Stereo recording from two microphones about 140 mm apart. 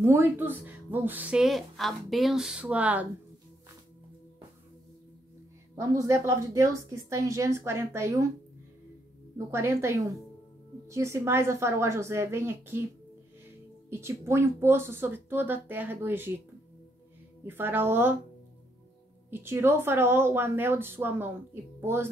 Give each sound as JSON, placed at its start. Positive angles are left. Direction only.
{"t": 0.0, "sound": "a woman's voice", "side_deg": -20}
{"t": 5.8, "sound": "a woman's voice", "side_deg": -20}
{"t": 9.5, "sound": "a woman's voice", "side_deg": -20}
{"t": 13.8, "sound": "a woman's voice", "side_deg": -20}
{"t": 17.5, "sound": "a woman's voice", "side_deg": -15}
{"t": 19.3, "sound": "a woman's voice", "side_deg": -15}